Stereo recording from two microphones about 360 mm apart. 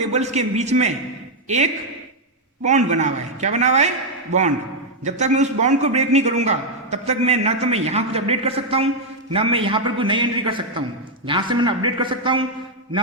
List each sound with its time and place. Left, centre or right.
0.1 s a man's voice: centre